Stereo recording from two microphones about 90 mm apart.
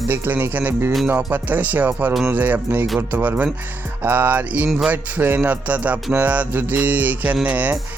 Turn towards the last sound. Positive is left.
turn(degrees=-15)  # may be behind; listen again after turning